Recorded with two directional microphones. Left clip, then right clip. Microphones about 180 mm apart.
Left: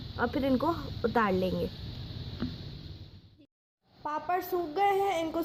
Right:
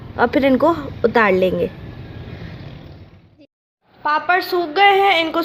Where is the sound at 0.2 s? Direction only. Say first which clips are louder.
Right 15 dB; 15° right (ahead or behind).